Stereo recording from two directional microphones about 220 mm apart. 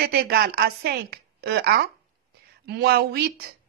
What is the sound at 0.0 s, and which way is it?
A woman's voice, 45° right (ahead or behind).